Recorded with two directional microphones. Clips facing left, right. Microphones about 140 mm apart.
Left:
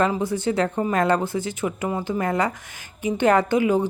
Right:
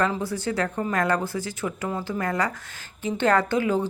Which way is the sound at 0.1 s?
20° left (ahead or behind).